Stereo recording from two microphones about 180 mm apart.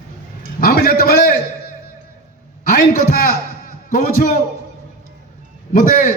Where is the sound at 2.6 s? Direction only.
45° left (ahead or behind).